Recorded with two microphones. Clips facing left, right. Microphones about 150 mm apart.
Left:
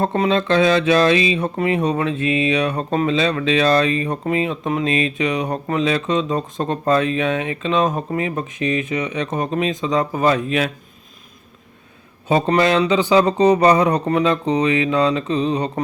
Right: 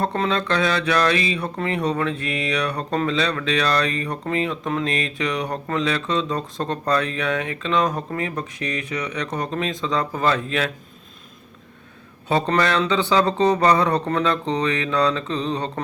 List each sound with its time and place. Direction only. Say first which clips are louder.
0.0 s speech: left 4 dB; 20° left (ahead or behind)
12.3 s speech: left 4 dB; 15° left (ahead or behind)